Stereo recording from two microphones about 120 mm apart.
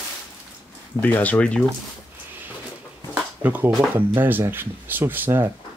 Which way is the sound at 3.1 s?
15° right (ahead or behind).